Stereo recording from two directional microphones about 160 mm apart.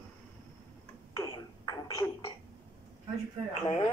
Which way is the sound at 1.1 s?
25° left (ahead or behind).